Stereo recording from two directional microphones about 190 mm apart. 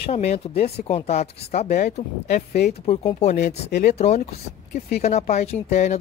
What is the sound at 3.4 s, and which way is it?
Speech, 60° left (ahead or behind).